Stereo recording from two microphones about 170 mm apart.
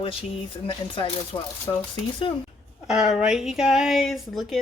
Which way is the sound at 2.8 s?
Centre (ahead or behind).